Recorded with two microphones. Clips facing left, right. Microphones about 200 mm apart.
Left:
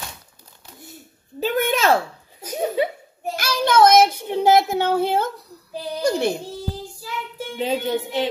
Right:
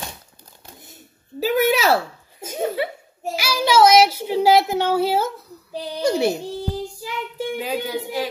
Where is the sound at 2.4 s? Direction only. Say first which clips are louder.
Left 2 dB; 25° right (ahead or behind).